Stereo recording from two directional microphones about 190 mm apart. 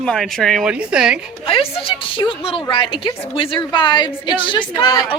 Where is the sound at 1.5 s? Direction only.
30° left (ahead or behind).